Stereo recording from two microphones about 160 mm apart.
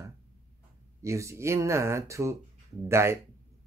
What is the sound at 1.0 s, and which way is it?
Speech, 20° right (ahead or behind).